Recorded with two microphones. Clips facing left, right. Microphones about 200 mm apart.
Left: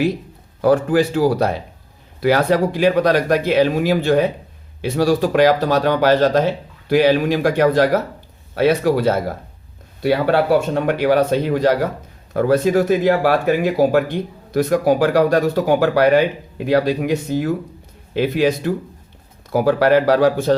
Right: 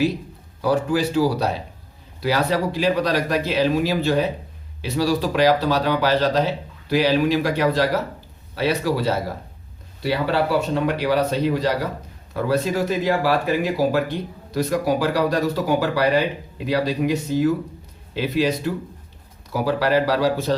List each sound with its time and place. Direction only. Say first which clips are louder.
0.6 s speech: left 5 dB; 55° left (ahead or behind)
14.5 s speech: left 5 dB; 55° left (ahead or behind)